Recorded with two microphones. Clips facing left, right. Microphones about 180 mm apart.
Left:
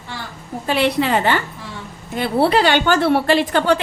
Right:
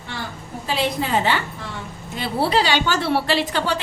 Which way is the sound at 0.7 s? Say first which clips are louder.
Left 5 dB; 70° left (ahead or behind).